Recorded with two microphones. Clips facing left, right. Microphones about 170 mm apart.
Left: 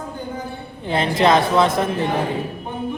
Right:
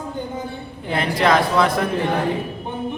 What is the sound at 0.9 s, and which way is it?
Speech, 25° left (ahead or behind).